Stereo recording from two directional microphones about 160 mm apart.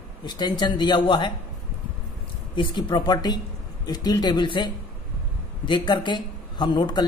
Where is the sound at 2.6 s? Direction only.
30° left (ahead or behind).